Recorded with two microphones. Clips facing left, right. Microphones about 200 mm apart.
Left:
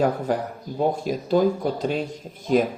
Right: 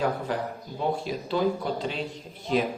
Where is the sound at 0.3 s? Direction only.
45° left (ahead or behind).